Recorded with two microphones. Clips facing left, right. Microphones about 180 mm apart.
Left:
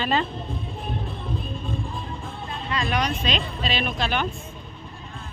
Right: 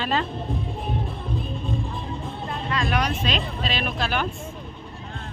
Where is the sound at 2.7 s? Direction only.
Centre (ahead or behind).